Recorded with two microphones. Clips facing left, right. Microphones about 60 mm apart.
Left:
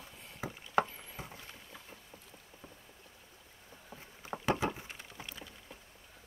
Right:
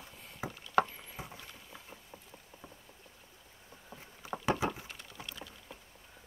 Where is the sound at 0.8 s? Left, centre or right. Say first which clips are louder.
Even; centre.